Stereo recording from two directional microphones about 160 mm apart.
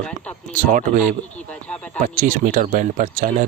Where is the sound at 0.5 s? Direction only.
55° right (ahead or behind).